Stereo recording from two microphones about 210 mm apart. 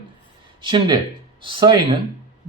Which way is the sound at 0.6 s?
20° right (ahead or behind).